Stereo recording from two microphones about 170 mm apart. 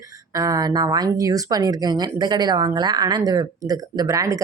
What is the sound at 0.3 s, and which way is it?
Speech, 20° right (ahead or behind).